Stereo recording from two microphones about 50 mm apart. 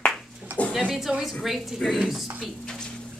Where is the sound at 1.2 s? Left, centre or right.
Centre.